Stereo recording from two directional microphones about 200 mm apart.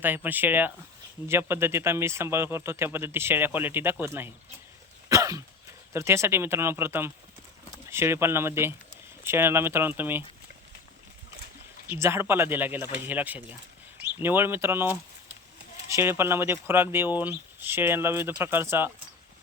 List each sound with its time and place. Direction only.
0.0 s a man's voice: 10° right (ahead or behind)
5.0 s cough: 15° right (ahead or behind)
5.9 s a man's voice: 15° right (ahead or behind)
11.9 s a man's voice: 10° right (ahead or behind)